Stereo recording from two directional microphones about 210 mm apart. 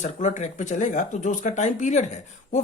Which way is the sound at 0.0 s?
35° left (ahead or behind).